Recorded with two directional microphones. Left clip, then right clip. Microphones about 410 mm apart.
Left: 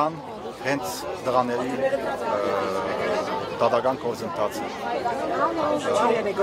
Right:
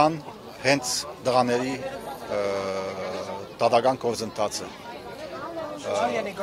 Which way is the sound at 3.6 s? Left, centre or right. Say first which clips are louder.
Right 1 dB; right.